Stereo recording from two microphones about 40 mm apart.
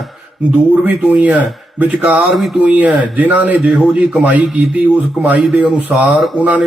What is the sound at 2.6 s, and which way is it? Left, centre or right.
A man's voice, right.